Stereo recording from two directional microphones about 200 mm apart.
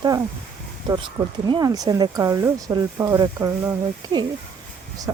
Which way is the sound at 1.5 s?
20° right (ahead or behind).